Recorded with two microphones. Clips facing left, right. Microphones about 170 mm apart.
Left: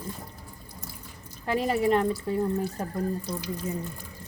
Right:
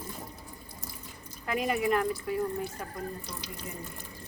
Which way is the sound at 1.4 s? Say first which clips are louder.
Left 4 dB; 30° left (ahead or behind).